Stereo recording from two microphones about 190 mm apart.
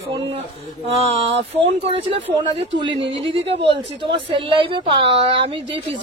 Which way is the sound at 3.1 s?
30° right (ahead or behind).